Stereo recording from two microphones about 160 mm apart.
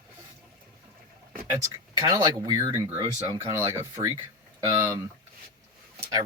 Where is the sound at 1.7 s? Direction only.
20° right (ahead or behind).